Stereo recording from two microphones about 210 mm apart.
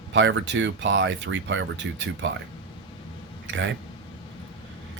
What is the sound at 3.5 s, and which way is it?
Speech, 60° right (ahead or behind).